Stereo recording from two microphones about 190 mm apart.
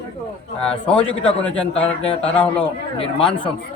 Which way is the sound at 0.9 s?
5° left (ahead or behind).